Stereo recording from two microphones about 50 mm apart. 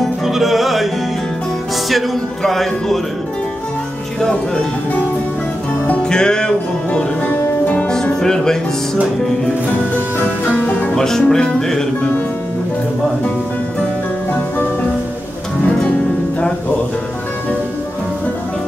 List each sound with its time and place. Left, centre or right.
0.2 s music: centre
1.9 s speech: centre
6.0 s music: centre; by 7.9 s left
7.9 s music: centre
10.4 s music: left
11.0 s speech: centre